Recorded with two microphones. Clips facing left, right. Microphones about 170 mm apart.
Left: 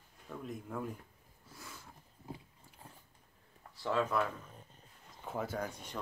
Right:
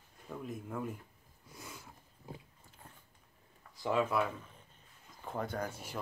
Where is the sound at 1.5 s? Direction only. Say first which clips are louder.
Right 2 dB; 15° right (ahead or behind).